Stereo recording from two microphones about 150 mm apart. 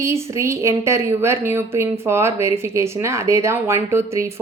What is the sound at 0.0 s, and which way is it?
A woman's voice, 20° right (ahead or behind).